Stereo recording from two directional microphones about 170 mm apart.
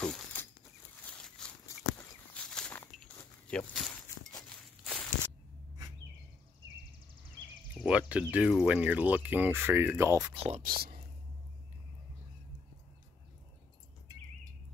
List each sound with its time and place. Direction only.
0.0 s a sound: 5° left (ahead or behind)
2.0 s walk: 5° left (ahead or behind)
3.9 s a sound: 20° left (ahead or behind)
4.5 s walk: 5° left (ahead or behind)
7.8 s speech: 5° right (ahead or behind)
10.3 s speech: 35° right (ahead or behind)
10.6 s speech: 55° right (ahead or behind)